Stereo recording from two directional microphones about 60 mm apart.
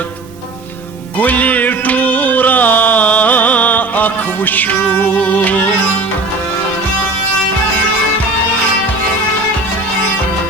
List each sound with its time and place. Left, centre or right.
1.2 s music: left